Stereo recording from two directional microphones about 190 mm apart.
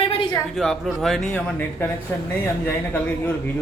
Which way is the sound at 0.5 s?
Centre (ahead or behind).